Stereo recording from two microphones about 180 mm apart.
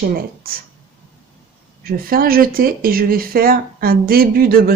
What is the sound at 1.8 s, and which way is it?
Speech, 55° right (ahead or behind).